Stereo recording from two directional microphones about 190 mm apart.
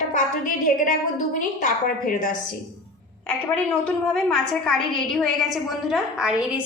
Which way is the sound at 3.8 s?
5° left (ahead or behind).